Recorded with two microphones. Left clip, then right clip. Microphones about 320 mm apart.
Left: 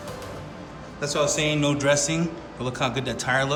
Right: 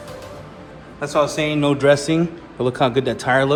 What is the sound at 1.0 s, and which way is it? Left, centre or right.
A man's voice, centre.